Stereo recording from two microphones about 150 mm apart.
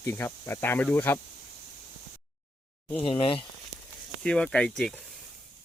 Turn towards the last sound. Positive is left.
turn(degrees=5)  # may be behind; listen again after turning